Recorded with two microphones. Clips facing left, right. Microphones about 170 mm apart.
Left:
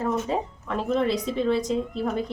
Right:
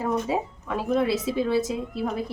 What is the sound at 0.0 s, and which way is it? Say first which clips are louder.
Speech: even; 5° right (ahead or behind).